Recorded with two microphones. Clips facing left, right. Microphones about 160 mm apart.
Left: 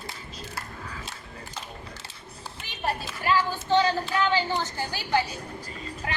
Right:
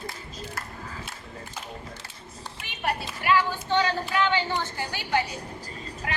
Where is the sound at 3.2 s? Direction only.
35° left (ahead or behind).